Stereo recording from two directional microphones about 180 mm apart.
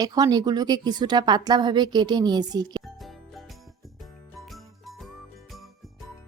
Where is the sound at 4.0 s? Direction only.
Centre (ahead or behind).